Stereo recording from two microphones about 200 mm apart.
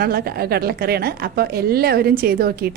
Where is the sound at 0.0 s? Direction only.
50° right (ahead or behind).